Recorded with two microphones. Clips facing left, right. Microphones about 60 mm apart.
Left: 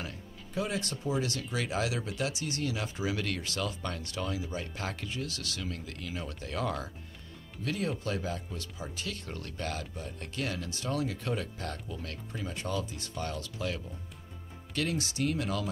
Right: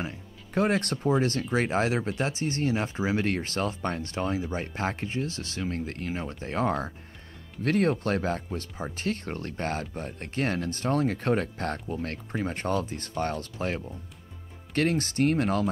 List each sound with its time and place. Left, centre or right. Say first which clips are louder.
0.6 s speech: right 8 dB; right
7.6 s speech: right 9 dB; right